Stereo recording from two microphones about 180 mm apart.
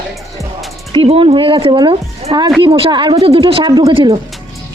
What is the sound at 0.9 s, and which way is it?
A woman's voice, 30° right (ahead or behind).